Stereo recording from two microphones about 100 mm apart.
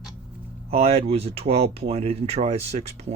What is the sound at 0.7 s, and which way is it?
Speech, 90° right.